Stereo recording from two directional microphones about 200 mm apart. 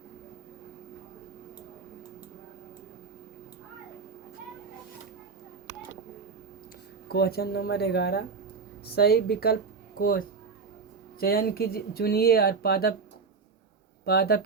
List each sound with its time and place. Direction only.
7.1 s speech: 50° left (ahead or behind)
14.0 s speech: 50° left (ahead or behind)